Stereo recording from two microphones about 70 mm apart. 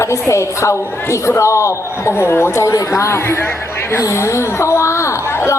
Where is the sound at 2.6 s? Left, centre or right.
Left.